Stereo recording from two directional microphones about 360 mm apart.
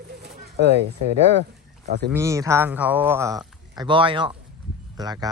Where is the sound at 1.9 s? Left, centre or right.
Right.